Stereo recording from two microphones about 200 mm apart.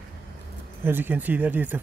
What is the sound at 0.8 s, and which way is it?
Speech, 10° right (ahead or behind).